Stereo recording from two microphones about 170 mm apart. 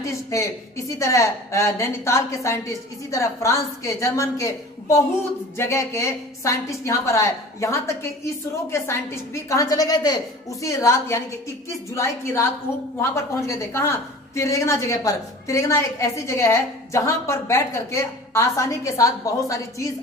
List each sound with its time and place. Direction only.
0.0 s a woman's voice: 15° left (ahead or behind)